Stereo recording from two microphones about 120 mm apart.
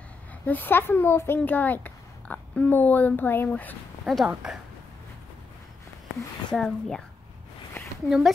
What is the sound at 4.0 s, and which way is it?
Speech, 5° right (ahead or behind).